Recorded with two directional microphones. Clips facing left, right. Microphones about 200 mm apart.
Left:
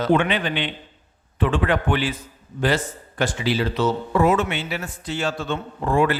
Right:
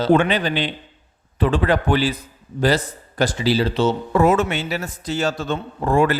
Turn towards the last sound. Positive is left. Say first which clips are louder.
# right 2 dB
turn(degrees=-40)  # may be behind; listen again after turning